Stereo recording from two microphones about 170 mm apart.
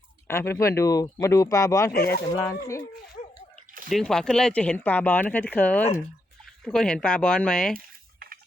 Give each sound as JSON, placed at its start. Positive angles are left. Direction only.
{"t": 0.3, "sound": "speech", "side_deg": 15}
{"t": 3.8, "sound": "speech", "side_deg": 0}